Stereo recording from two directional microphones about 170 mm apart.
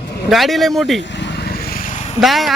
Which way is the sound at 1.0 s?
90° left.